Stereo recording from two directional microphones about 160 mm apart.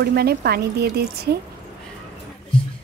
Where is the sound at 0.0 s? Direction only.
85° right.